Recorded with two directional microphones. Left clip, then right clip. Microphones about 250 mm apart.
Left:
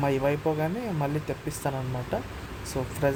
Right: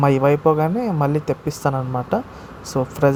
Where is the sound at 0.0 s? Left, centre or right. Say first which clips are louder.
Right 10 dB; right.